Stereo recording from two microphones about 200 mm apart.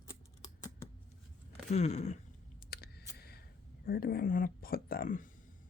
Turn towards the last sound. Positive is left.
turn(degrees=45)  # may be behind; listen again after turning